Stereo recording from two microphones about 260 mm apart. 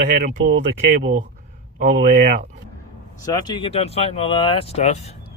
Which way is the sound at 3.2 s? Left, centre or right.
Centre.